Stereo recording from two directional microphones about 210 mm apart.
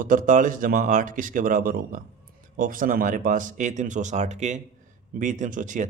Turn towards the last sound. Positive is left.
turn(degrees=-35)  # may be behind; listen again after turning